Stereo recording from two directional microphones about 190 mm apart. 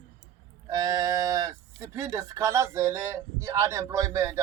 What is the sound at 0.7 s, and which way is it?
Speech, 20° right (ahead or behind).